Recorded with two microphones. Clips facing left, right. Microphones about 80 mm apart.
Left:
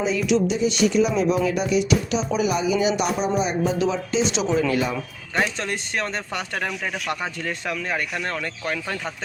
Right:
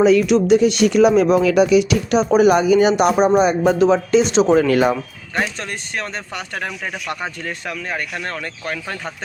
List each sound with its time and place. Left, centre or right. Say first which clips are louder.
0.0 s speech: right 11 dB; right
0.3 s speech: right 7 dB; right
3.8 s speech: right 8 dB; right
5.3 s speech: right 1 dB; centre
7.4 s speech: even; centre